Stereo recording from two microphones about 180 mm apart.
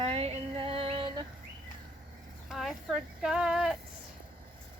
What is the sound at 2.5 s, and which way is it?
Speech, centre (ahead or behind).